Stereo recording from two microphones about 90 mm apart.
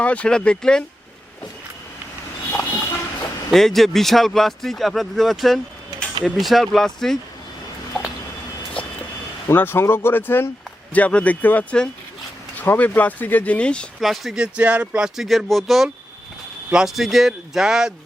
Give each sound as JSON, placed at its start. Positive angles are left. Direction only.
{"t": 0.0, "sound": "speech", "side_deg": 15}
{"t": 2.5, "sound": "a sound", "side_deg": 15}
{"t": 3.5, "sound": "speech", "side_deg": 5}
{"t": 9.5, "sound": "speech", "side_deg": 25}
{"t": 14.0, "sound": "speech", "side_deg": 0}